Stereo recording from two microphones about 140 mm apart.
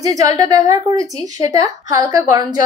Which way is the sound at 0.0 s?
25° right (ahead or behind).